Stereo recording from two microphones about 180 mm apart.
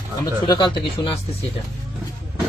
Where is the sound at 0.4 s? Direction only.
25° left (ahead or behind).